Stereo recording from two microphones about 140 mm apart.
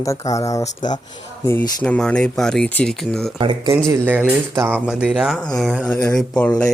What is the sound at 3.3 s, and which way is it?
Speech, 35° right (ahead or behind).